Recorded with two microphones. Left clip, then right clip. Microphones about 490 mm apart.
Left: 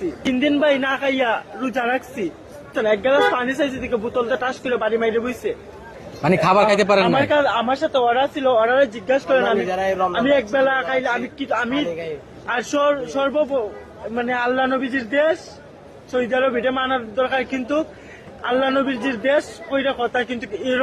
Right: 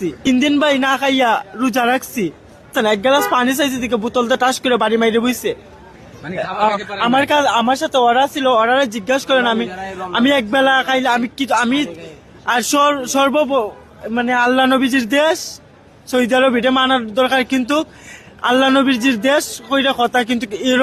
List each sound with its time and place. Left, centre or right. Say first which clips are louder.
0.3 s a man's voice: right 3 dB; right
6.2 s a man's voice: left 3 dB; left
7.1 s a man's voice: right 3 dB; right
9.6 s a man's voice: left 7 dB; centre
10.1 s a man's voice: right 3 dB; right